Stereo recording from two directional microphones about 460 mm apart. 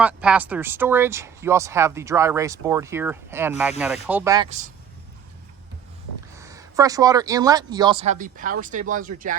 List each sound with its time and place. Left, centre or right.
0.0 s speech: centre
6.3 s speech: centre